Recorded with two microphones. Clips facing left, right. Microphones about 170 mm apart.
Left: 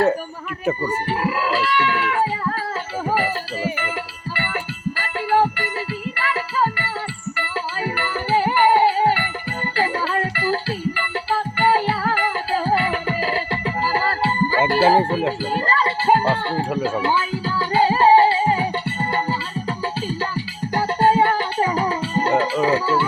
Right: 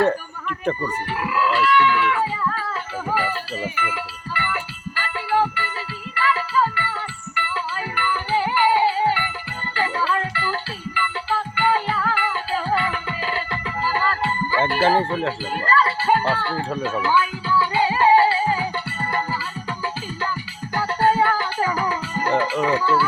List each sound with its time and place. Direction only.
0.8 s speech: 30° left (ahead or behind)
3.8 s music: 40° left (ahead or behind)
14.8 s speech: 10° left (ahead or behind)
15.5 s music: 30° left (ahead or behind)
22.6 s speech: 30° left (ahead or behind)